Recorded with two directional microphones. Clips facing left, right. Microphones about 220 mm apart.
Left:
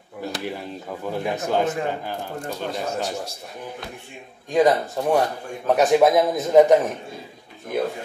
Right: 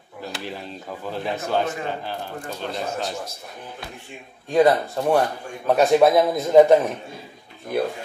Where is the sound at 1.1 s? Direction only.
10° left (ahead or behind).